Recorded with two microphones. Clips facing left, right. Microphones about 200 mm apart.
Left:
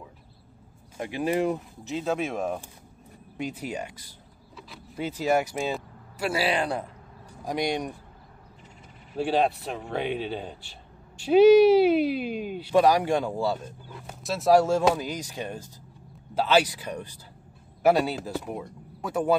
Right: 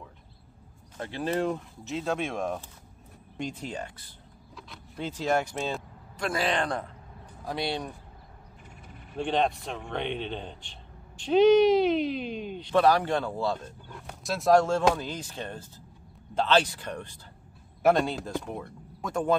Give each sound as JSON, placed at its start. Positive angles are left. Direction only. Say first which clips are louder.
{"t": 0.9, "sound": "a man's voice", "louder": "left 3 dB", "side_deg": 10}
{"t": 9.1, "sound": "a man's voice", "louder": "left 3 dB", "side_deg": 5}